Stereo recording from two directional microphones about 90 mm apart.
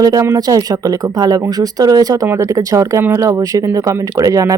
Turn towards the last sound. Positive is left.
turn(degrees=-40)  # may be behind; listen again after turning